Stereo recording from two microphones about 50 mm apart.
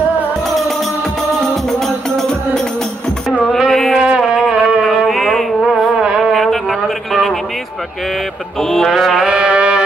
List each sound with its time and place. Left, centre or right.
0.4 s music: centre
3.4 s a sound: centre
4.3 s music: centre
4.8 s music: centre
6.0 s music: centre
6.3 s a sound: centre
8.1 s mantra: centre
9.2 s music: centre